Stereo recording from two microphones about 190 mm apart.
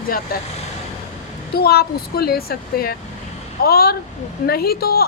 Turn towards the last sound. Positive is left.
turn(degrees=55)  # may be behind; listen again after turning